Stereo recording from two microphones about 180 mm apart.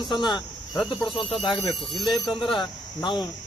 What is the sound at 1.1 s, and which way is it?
Speech, 30° left (ahead or behind).